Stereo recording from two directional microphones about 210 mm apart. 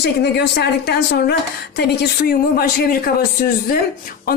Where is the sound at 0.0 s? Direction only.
50° left (ahead or behind).